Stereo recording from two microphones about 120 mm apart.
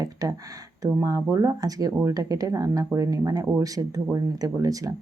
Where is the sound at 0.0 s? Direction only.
30° right (ahead or behind).